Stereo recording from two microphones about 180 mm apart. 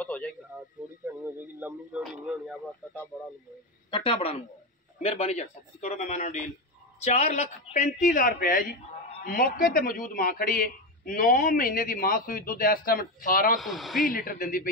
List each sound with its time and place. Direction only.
0.0 s a sound: 5° left (ahead or behind)
1.6 s speech: 5° right (ahead or behind)
3.9 s a man's voice: 30° left (ahead or behind); by 13.6 s 50° left (ahead or behind)
13.6 s speech: centre (ahead or behind)
14.1 s a man's voice: 50° left (ahead or behind)